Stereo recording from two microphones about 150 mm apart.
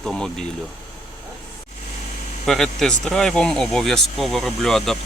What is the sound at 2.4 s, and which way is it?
Speech, centre (ahead or behind).